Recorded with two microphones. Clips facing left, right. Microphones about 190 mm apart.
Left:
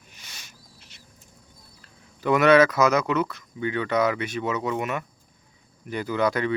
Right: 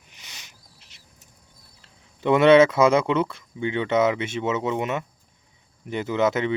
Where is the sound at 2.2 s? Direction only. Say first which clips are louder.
Right 3 dB; 25° right (ahead or behind).